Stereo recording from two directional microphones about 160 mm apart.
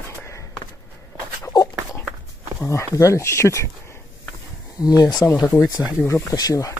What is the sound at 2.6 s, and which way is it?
Speech, 20° left (ahead or behind).